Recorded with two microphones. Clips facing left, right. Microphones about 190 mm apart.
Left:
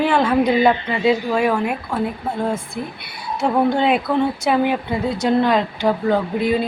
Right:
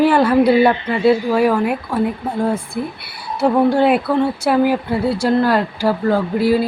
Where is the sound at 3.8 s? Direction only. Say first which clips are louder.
Right 3 dB; 5° right (ahead or behind).